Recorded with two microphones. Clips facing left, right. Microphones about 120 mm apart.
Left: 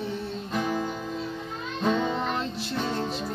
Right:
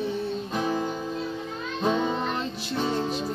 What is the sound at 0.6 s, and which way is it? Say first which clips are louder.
Music: even; 15° right (ahead or behind).